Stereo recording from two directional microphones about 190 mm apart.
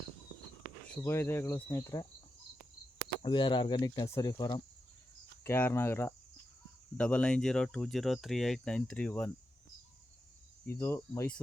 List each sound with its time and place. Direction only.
1.0 s cricket: 15° left (ahead or behind)
3.2 s speech: 25° left (ahead or behind)
5.4 s cricket: 10° left (ahead or behind)
6.9 s speech: 5° left (ahead or behind)
10.7 s cricket: 15° left (ahead or behind)